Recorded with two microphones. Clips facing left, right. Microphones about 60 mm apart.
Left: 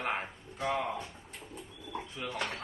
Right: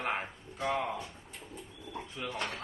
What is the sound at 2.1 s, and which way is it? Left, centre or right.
Speech, centre.